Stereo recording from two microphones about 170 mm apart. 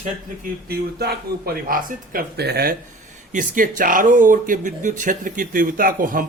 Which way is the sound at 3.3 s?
50° right (ahead or behind).